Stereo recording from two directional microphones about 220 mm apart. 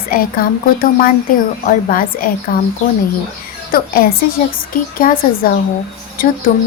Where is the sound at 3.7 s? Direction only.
40° left (ahead or behind).